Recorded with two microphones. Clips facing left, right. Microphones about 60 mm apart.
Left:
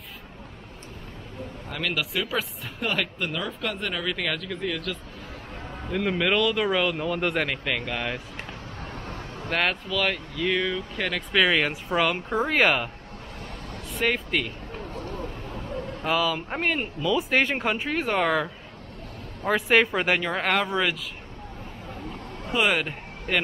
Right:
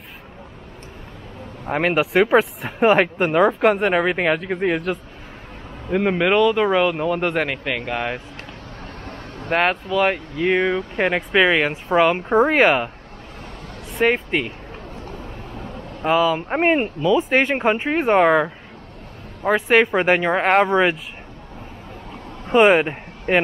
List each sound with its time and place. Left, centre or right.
1.7 s speech: right
5.9 s speech: right
9.5 s speech: centre; by 11.2 s right
11.3 s speech: right
14.0 s speech: right
16.0 s speech: right
19.5 s speech: right
22.5 s speech: right